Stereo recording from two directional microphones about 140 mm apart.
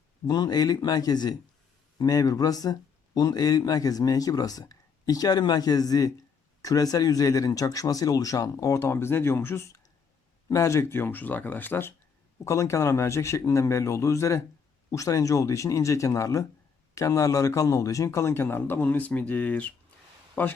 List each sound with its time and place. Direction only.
0.3 s speech: 30° left (ahead or behind); by 20.5 s 15° left (ahead or behind)